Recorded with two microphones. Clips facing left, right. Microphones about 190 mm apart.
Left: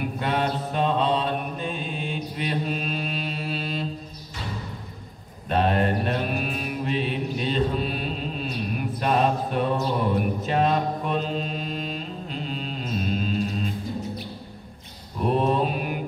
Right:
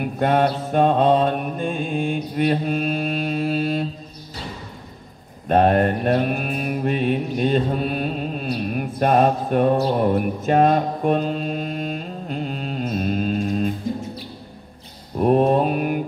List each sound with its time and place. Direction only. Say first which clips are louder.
0.2 s mantra: right 8 dB; 50° right (ahead or behind)
5.5 s mantra: right 6 dB; 50° right (ahead or behind)
15.1 s mantra: right 6 dB; 50° right (ahead or behind)